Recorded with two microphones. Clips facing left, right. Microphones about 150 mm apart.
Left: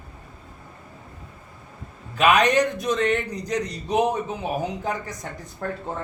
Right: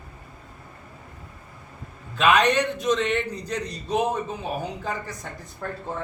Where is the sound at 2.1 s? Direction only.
10° left (ahead or behind).